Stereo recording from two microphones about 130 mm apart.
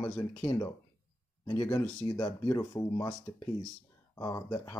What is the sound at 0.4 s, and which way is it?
Speech, 35° left (ahead or behind).